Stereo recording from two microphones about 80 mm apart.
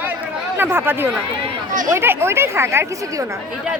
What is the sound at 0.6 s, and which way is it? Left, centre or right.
Speech, right.